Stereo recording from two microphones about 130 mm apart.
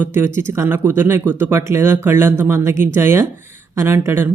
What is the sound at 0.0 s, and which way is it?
Speech, 15° right (ahead or behind).